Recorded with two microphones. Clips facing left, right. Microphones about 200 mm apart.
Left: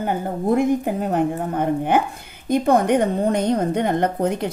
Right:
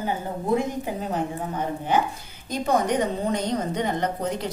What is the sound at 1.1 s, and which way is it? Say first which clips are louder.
A woman's voice: left 7 dB; 60° left (ahead or behind).